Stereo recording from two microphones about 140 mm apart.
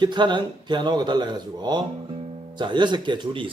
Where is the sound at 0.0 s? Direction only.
35° right (ahead or behind).